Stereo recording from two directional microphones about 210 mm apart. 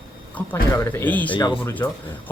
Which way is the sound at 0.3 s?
10° left (ahead or behind).